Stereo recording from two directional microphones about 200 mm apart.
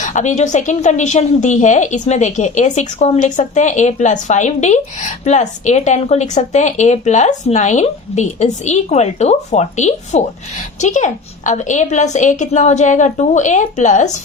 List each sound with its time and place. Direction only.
0.0 s a woman's voice: 40° left (ahead or behind)